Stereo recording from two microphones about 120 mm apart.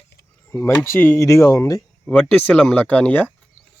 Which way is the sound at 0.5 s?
25° left (ahead or behind).